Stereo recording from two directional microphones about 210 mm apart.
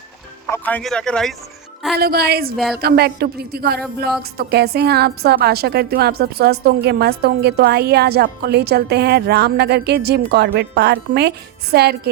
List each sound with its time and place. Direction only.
0.5 s speech: 5° left (ahead or behind)
2.0 s a woman's voice: 50° right (ahead or behind)